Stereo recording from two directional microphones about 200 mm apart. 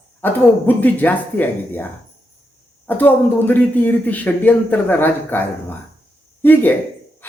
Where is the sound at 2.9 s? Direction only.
10° left (ahead or behind).